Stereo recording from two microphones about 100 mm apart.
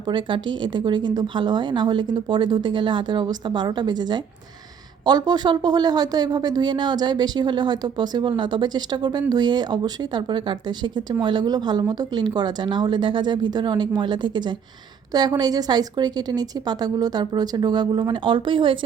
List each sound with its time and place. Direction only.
0.0 s speech: 50° right (ahead or behind)